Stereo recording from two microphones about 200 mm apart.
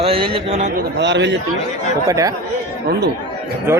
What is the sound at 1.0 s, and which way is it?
Speech, 60° right (ahead or behind).